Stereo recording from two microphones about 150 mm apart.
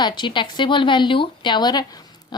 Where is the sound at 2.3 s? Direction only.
30° left (ahead or behind).